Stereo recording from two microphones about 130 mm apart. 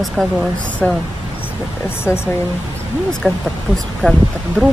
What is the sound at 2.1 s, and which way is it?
Speech, 20° left (ahead or behind).